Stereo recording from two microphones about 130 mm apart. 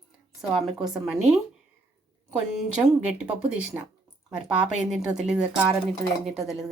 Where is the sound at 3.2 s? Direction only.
5° right (ahead or behind).